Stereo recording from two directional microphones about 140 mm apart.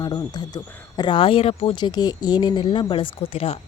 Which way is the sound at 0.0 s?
30° left (ahead or behind).